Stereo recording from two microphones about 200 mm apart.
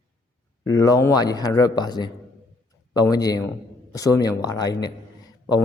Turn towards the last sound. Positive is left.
turn(degrees=20)  # may be behind; listen again after turning